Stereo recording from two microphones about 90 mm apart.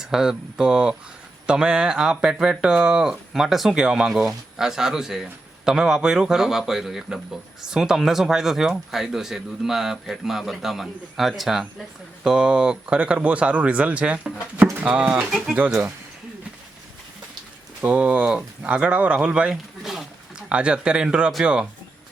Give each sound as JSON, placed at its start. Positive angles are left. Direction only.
{"t": 0.0, "sound": "speech", "side_deg": -5}
{"t": 17.7, "sound": "speech", "side_deg": -15}